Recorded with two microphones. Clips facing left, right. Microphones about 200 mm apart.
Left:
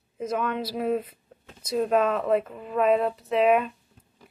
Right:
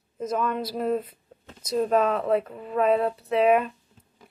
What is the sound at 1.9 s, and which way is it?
Speech, 40° right (ahead or behind).